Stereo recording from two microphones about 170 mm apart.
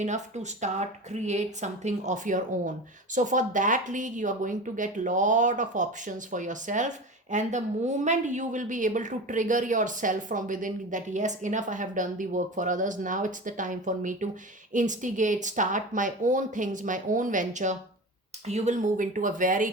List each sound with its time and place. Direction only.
0.0 s speech: 45° right (ahead or behind)